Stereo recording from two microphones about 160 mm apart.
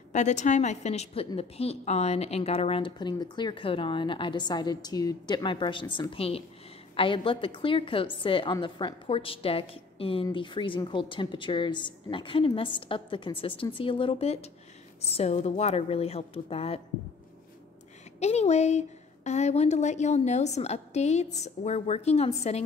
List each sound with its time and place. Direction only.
0.1 s a woman's voice: 45° left (ahead or behind)
18.2 s a woman's voice: 45° left (ahead or behind)